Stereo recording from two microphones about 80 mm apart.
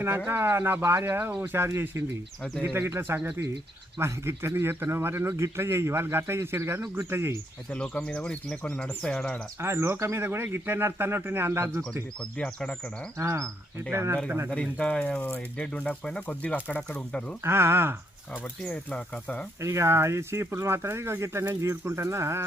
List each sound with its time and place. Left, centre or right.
0.3 s speech: right
7.7 s speech: centre
9.6 s speech: right
12.4 s speech: centre
13.1 s speech: right
14.5 s speech: centre
17.4 s speech: right
18.7 s speech: centre
19.6 s speech: right